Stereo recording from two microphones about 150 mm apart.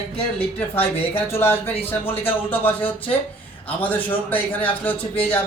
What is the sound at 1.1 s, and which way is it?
Speech, 15° left (ahead or behind).